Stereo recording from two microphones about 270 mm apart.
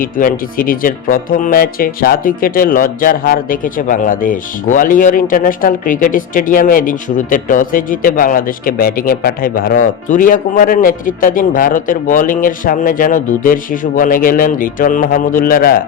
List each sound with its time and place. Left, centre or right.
0.0 s speech: left